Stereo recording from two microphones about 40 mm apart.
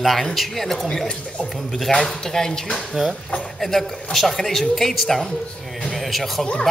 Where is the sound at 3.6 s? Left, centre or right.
Centre.